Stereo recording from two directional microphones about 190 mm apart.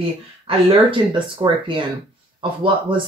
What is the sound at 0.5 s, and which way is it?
Speech, 25° right (ahead or behind).